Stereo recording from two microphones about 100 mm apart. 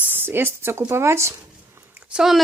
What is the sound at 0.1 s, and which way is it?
Speech, 20° right (ahead or behind).